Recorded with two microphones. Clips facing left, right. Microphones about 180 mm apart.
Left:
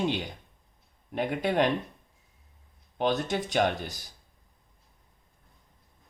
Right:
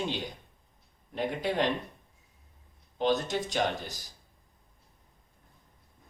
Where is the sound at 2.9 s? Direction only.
55° left (ahead or behind).